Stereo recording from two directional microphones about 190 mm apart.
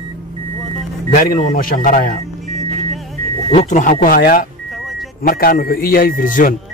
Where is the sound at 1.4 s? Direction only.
45° left (ahead or behind).